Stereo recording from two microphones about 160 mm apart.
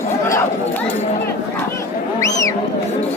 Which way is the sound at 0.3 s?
15° left (ahead or behind).